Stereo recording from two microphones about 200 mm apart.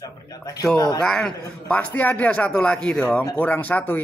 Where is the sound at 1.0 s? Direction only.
5° left (ahead or behind).